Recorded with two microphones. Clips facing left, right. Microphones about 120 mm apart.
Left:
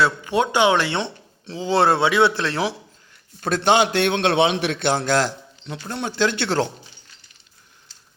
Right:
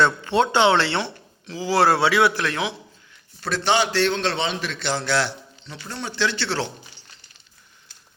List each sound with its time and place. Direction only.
0.0 s speech: 10° left (ahead or behind); by 2.7 s 35° left (ahead or behind)
3.4 s a man's voice: 50° left (ahead or behind)